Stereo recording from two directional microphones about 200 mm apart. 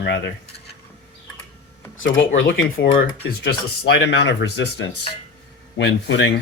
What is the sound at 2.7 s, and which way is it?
Speech, 55° left (ahead or behind).